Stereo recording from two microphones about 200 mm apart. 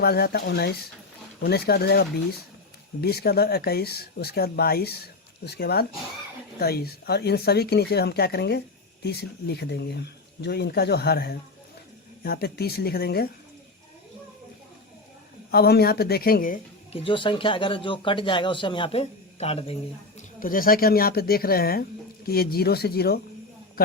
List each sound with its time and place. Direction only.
0.0 s speech: 50° left (ahead or behind)
15.5 s speech: 50° left (ahead or behind)
16.9 s speech: 25° left (ahead or behind)
20.1 s speech: 45° left (ahead or behind)